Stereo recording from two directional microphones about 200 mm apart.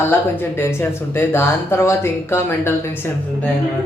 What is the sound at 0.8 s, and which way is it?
A man's voice, 10° left (ahead or behind).